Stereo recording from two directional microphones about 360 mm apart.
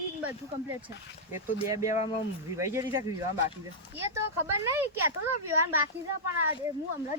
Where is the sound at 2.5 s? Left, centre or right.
Centre.